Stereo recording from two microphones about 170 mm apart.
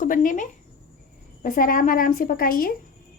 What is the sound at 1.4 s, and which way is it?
A woman's voice, 55° left (ahead or behind).